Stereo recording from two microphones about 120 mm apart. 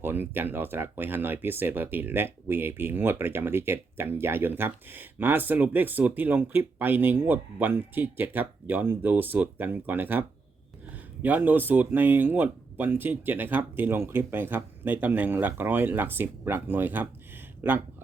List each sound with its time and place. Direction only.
0.0 s speech: 15° right (ahead or behind)